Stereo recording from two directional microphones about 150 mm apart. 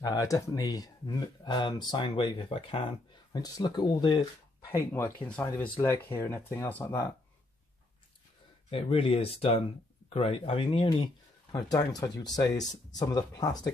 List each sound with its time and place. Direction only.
0.0 s speech: 25° left (ahead or behind)
3.3 s speech: 25° left (ahead or behind)
4.6 s speech: 15° left (ahead or behind)
8.6 s speech: 40° left (ahead or behind)
11.5 s speech: 25° left (ahead or behind)